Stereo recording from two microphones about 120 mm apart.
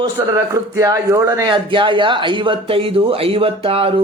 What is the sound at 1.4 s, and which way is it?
A woman's voice, 45° right (ahead or behind).